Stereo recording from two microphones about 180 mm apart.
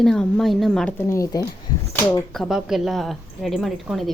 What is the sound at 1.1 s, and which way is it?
Speech, 15° left (ahead or behind).